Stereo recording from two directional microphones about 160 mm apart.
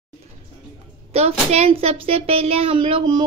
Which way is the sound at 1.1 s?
40° right (ahead or behind).